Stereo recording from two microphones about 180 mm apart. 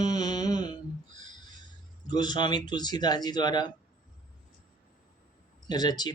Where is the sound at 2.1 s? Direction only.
25° left (ahead or behind).